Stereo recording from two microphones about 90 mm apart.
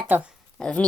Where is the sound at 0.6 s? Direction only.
15° left (ahead or behind).